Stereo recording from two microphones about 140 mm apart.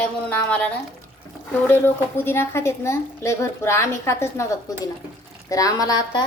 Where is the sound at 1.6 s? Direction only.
15° left (ahead or behind).